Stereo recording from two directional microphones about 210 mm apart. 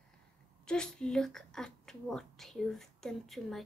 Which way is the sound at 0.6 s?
5° left (ahead or behind).